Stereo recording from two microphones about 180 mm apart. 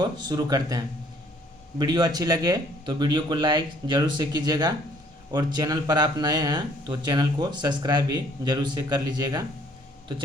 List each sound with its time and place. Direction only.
0.0 s speech: 25° right (ahead or behind)
1.8 s speech: 25° right (ahead or behind)